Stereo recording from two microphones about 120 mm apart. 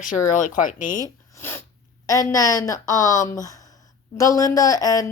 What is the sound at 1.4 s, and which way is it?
Sneeze, 20° left (ahead or behind).